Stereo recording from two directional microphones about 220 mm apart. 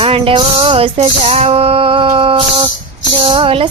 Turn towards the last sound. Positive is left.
turn(degrees=-25)  # may be behind; listen again after turning